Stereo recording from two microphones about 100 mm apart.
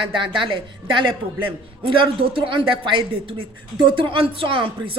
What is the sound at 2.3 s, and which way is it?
Speech, 60° right (ahead or behind).